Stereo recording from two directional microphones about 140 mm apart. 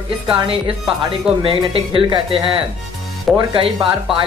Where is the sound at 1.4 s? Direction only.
40° right (ahead or behind).